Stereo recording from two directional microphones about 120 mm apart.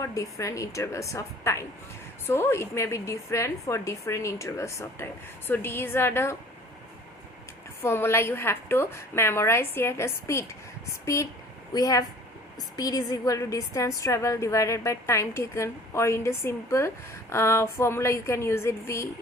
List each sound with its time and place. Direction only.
0.0 s a woman's voice: 25° left (ahead or behind)
7.8 s a woman's voice: 20° left (ahead or behind)